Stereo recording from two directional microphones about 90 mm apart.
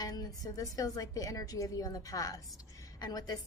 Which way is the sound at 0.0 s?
45° left (ahead or behind).